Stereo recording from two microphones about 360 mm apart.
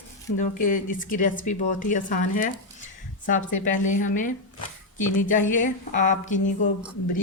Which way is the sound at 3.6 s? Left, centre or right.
Left.